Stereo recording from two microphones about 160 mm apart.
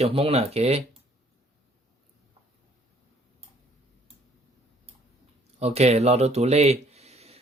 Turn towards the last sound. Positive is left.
turn(degrees=-40)  # may be behind; listen again after turning